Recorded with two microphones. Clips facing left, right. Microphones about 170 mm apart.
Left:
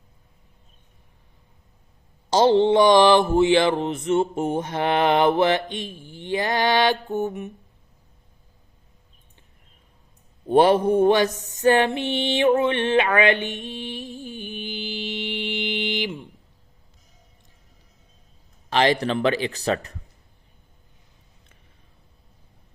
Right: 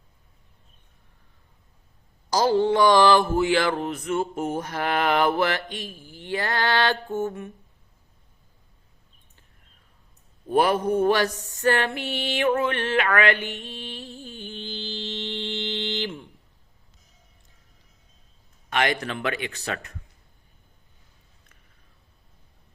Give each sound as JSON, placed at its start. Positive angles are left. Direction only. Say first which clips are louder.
{"t": 2.3, "sound": "a sound", "louder": "left 4 dB", "side_deg": 25}
{"t": 10.5, "sound": "mantra", "louder": "left 5 dB", "side_deg": 30}
{"t": 18.7, "sound": "a man's voice", "louder": "left 5 dB", "side_deg": 30}